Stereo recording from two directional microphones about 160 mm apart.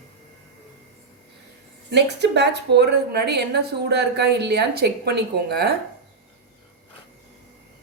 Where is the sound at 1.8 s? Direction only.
90° right.